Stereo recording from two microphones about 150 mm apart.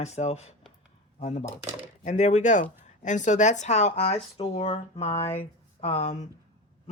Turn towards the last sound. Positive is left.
turn(degrees=50)  # may be behind; listen again after turning